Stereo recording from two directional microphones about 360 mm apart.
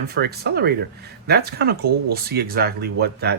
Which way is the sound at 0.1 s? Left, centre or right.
Right.